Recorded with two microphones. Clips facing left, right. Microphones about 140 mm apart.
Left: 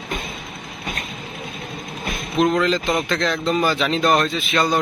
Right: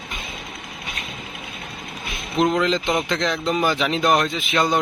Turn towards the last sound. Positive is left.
turn(degrees=-20)  # may be behind; listen again after turning